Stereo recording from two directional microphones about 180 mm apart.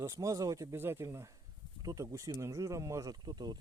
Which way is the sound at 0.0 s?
20° right (ahead or behind).